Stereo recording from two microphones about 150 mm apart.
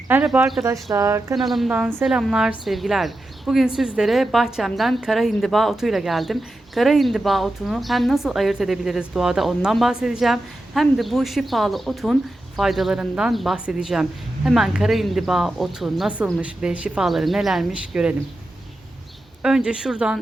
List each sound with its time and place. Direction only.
0.1 s a woman's voice: 10° right (ahead or behind)
0.6 s speech: 20° right (ahead or behind)
1.4 s a woman's voice: centre (ahead or behind)
19.4 s a woman's voice: 5° right (ahead or behind)